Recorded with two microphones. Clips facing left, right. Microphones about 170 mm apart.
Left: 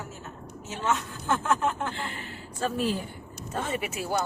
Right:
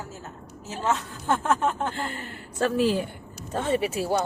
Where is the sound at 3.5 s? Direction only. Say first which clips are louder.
Right 6 dB; 35° right (ahead or behind).